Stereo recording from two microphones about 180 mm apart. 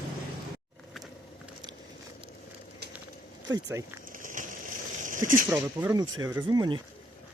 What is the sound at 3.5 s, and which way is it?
Speech, 20° right (ahead or behind).